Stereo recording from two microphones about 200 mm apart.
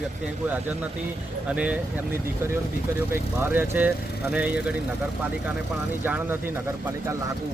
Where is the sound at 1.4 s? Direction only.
5° right (ahead or behind).